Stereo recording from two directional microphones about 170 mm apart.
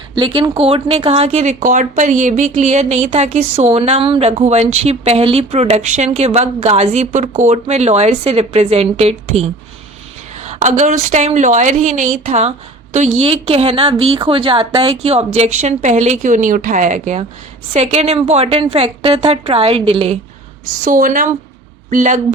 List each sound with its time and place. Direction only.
0.2 s speech: 30° right (ahead or behind)
20.8 s speech: 50° right (ahead or behind)